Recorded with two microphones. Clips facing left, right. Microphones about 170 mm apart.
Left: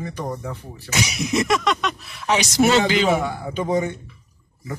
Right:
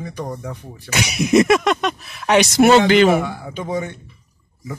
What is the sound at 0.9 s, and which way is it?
Speech, 60° right (ahead or behind).